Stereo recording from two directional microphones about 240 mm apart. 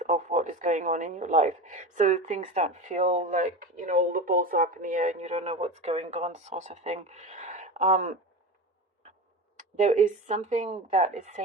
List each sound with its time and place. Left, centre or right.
0.0 s a woman's voice: right
9.6 s a woman's voice: right